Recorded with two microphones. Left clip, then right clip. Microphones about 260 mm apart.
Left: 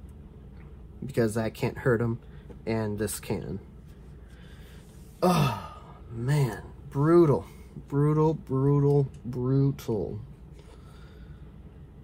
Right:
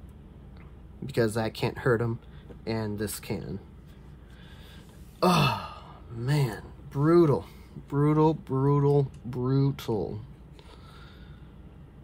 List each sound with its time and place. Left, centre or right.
1.0 s speech: centre
5.2 s speech: centre